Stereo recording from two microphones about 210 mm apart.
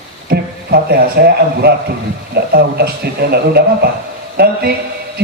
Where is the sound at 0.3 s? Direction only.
45° right (ahead or behind).